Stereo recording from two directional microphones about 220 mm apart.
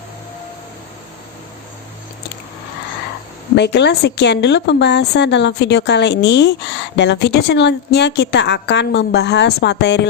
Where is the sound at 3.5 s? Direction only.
50° left (ahead or behind).